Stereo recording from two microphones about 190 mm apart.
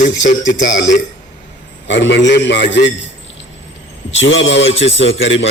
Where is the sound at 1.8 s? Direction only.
70° left (ahead or behind).